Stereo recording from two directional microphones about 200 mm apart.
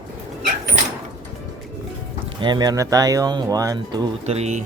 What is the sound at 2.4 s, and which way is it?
Speech, 20° right (ahead or behind).